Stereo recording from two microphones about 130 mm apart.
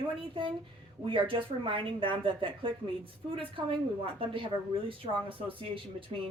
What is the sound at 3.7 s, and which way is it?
A woman's voice, 45° right (ahead or behind).